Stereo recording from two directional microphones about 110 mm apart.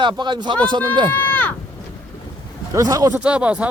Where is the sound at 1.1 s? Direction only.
15° left (ahead or behind).